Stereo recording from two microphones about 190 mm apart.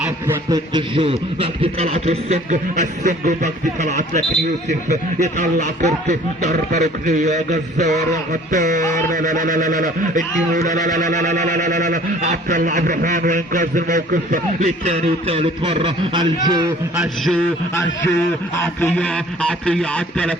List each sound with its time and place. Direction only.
0.3 s a man's voice: 20° right (ahead or behind)
16.9 s a man's voice: centre (ahead or behind)
18.6 s a man's voice: 10° left (ahead or behind)